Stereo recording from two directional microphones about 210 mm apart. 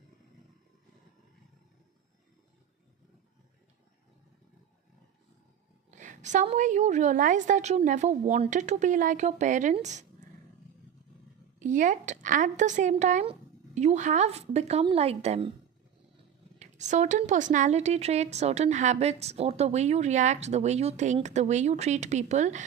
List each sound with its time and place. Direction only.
5.9 s speech: 35° right (ahead or behind)
11.6 s speech: 35° right (ahead or behind)
16.6 s speech: 35° right (ahead or behind)